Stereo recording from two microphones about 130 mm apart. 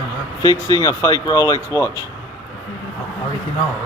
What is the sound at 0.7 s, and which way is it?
Speech, 25° left (ahead or behind).